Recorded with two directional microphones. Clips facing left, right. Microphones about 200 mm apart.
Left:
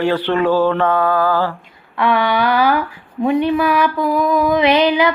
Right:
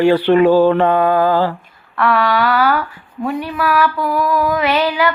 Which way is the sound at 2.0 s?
15° left (ahead or behind).